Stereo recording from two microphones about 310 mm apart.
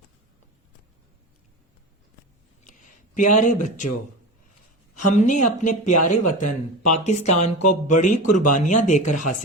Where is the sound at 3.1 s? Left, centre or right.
Left.